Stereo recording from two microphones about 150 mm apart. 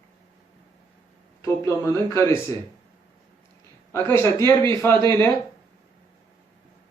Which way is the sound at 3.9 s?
15° left (ahead or behind).